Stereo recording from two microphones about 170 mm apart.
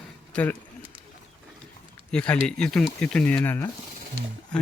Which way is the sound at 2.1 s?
5° left (ahead or behind).